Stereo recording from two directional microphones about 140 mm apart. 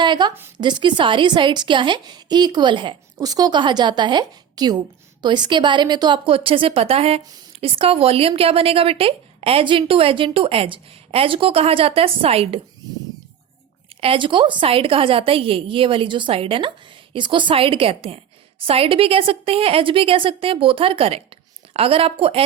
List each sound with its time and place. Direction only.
0.0 s a woman's voice: 30° right (ahead or behind)
14.0 s a woman's voice: 40° right (ahead or behind)